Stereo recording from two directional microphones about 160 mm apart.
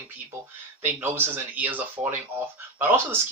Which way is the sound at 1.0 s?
15° right (ahead or behind).